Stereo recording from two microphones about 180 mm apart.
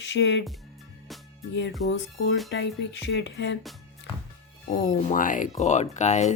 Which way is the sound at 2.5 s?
80° left.